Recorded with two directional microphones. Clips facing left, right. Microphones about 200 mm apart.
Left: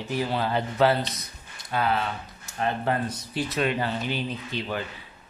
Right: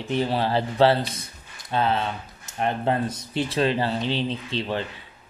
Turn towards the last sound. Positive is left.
turn(degrees=-25)  # may be behind; listen again after turning